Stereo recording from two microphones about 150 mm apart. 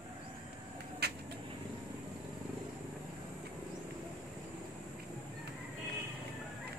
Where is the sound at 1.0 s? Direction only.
90° right.